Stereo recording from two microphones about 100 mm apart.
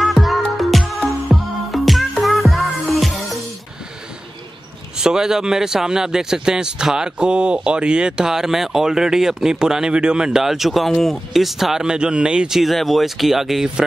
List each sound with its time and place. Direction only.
0.0 s music: centre (ahead or behind)
4.9 s speech: 5° right (ahead or behind)